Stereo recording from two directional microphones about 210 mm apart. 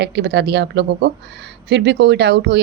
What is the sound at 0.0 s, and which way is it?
A woman's voice, 55° right (ahead or behind).